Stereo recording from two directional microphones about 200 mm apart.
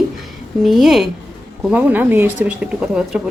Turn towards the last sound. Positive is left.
turn(degrees=-5)  # may be behind; listen again after turning